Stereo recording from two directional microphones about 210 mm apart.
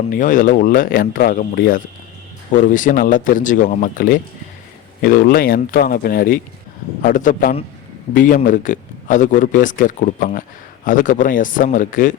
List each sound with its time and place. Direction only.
0.1 s speech: 40° left (ahead or behind)